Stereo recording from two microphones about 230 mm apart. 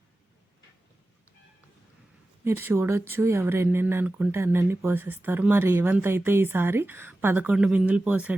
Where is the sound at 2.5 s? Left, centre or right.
Centre.